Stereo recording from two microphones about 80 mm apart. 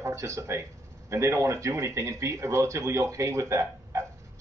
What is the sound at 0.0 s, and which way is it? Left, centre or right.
A man's voice, right.